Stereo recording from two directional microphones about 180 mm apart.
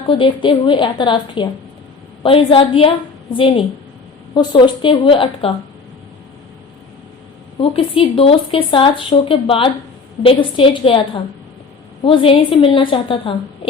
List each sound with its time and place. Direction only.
0.1 s speech: 25° left (ahead or behind)
7.6 s speech: 30° left (ahead or behind)